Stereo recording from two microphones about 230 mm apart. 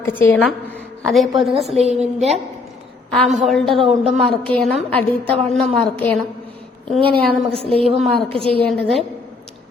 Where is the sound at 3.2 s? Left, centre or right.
Centre.